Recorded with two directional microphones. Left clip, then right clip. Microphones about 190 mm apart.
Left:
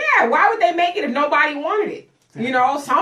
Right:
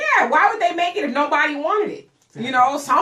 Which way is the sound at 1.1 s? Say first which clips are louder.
Left 1 dB; 20° right (ahead or behind).